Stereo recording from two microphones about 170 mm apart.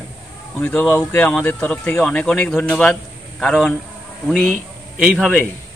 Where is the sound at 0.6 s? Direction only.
15° left (ahead or behind).